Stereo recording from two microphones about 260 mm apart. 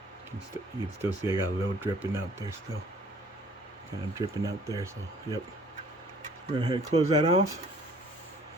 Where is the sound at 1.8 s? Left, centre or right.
Centre.